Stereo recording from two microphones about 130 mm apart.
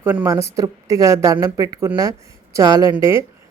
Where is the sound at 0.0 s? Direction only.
15° right (ahead or behind).